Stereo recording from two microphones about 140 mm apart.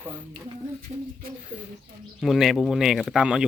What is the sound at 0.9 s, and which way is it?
Speech, 45° right (ahead or behind).